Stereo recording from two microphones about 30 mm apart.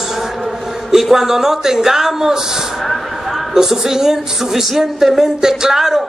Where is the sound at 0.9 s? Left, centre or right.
Centre.